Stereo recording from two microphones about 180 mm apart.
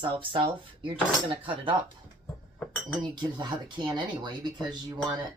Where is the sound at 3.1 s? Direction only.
25° right (ahead or behind).